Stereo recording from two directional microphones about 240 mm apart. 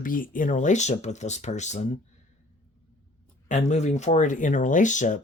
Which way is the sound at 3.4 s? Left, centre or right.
Left.